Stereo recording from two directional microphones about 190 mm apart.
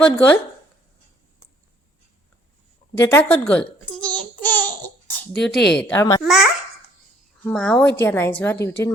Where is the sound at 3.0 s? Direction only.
10° left (ahead or behind).